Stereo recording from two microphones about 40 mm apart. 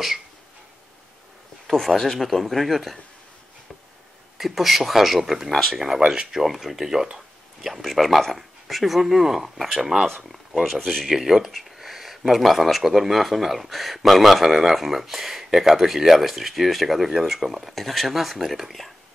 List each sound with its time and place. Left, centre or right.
1.7 s speech: centre
4.4 s speech: centre
6.0 s speech: centre
6.4 s speech: centre
8.0 s speech: centre